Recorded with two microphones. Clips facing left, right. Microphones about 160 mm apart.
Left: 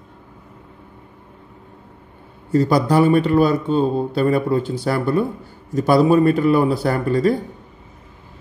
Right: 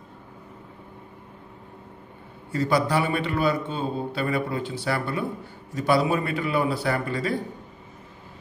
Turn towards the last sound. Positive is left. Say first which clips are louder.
# left 8 dB
turn(degrees=40)  # may be behind; listen again after turning